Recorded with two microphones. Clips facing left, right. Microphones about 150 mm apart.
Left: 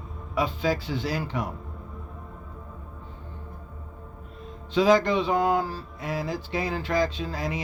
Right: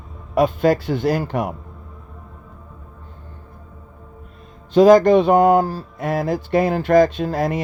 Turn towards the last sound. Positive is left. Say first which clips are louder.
# right 10 dB
turn(degrees=-50)  # may be behind; listen again after turning